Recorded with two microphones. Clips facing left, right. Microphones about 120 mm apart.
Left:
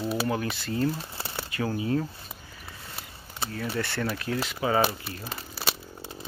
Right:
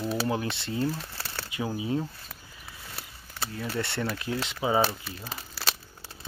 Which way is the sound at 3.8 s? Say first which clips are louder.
Even; 25° right (ahead or behind).